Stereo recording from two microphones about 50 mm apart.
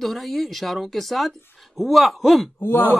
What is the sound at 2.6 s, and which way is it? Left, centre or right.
Speech, left.